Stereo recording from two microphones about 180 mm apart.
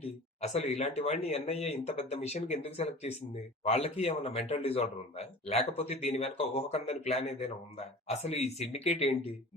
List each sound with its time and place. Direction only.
0.4 s speech: 35° left (ahead or behind)